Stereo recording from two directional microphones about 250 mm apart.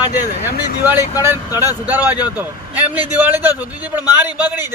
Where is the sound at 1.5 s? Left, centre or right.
Centre.